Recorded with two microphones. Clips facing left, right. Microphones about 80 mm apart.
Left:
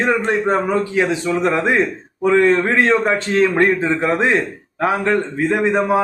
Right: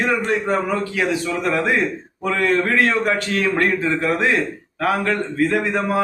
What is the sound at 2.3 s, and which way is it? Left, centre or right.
A man's voice, left.